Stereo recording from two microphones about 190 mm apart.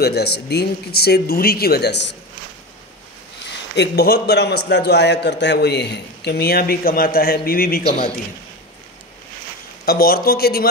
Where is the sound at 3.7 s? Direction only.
55° left (ahead or behind).